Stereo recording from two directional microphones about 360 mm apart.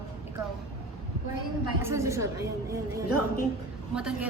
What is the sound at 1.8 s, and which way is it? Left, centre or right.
Speech, centre.